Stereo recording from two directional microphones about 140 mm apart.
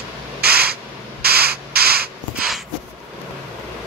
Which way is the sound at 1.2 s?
90° right.